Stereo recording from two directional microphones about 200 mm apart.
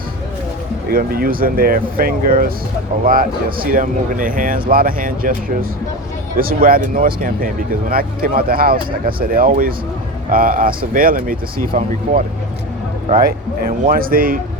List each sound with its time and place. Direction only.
0.9 s speech: 45° right (ahead or behind)